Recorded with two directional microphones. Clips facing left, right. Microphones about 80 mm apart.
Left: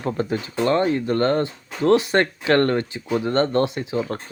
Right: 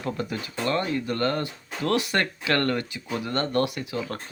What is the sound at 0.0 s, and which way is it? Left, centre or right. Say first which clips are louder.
Speech: left 6 dB; left.